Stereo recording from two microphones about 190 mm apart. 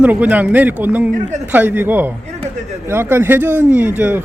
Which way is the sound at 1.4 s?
10° right (ahead or behind).